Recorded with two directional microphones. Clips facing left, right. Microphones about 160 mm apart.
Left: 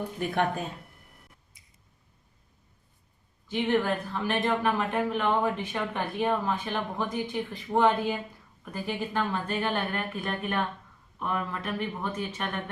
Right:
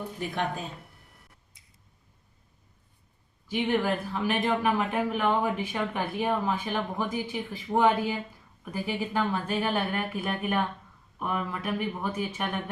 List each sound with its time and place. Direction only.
0.2 s speech: 55° left (ahead or behind)
3.5 s speech: 10° right (ahead or behind)